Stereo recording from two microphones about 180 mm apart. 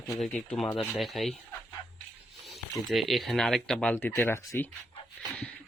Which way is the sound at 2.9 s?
Centre (ahead or behind).